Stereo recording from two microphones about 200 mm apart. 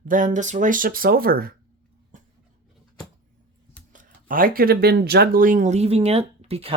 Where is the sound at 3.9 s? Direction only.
45° right (ahead or behind).